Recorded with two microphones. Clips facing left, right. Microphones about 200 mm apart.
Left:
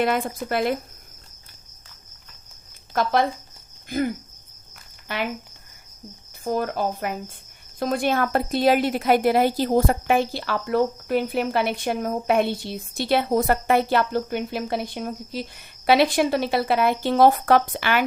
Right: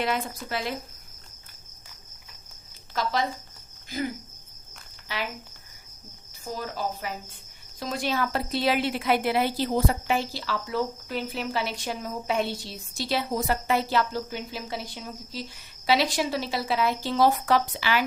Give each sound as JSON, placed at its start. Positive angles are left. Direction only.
{"t": 0.0, "sound": "speech", "side_deg": 50}
{"t": 2.9, "sound": "a woman's voice", "side_deg": 55}
{"t": 6.4, "sound": "a woman's voice", "side_deg": 55}